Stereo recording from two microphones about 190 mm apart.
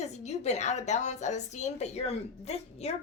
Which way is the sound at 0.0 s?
35° left (ahead or behind).